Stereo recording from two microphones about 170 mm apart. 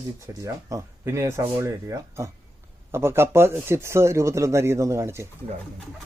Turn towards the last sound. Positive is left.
turn(degrees=-15)  # may be behind; listen again after turning